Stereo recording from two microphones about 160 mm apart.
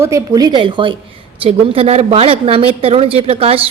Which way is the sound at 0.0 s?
20° right (ahead or behind).